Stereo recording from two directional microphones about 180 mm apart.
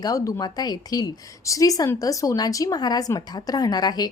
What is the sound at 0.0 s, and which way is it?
A woman's voice, 20° left (ahead or behind).